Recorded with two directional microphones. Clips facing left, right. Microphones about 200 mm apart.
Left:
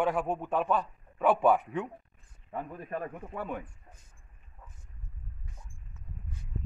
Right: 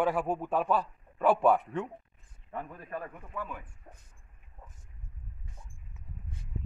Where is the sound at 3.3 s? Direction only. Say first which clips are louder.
Left 2 dB; 55° left (ahead or behind).